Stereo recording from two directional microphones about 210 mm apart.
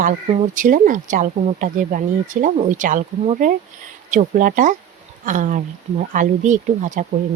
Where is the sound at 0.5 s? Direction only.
40° right (ahead or behind).